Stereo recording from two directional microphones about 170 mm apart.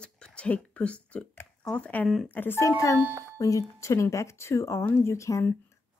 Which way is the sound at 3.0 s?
10° right (ahead or behind).